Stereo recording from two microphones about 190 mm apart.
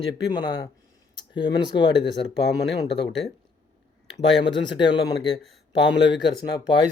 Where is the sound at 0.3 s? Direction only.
20° left (ahead or behind).